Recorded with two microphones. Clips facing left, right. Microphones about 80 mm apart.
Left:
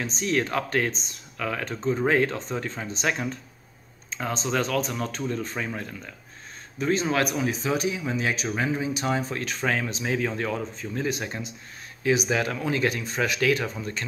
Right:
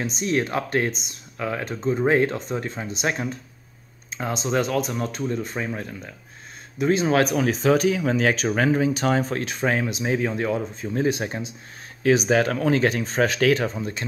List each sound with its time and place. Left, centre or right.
0.0 s speech: centre
1.7 s speech: centre
4.2 s speech: centre
7.3 s speech: right
9.4 s speech: right
12.1 s speech: right
12.9 s speech: right